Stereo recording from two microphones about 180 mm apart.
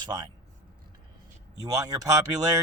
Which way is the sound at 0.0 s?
25° right (ahead or behind).